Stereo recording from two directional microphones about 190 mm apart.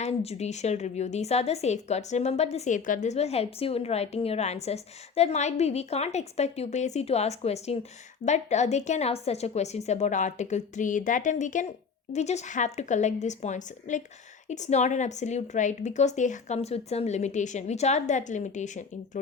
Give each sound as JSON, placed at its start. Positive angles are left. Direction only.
{"t": 0.0, "sound": "a woman's voice", "side_deg": 35}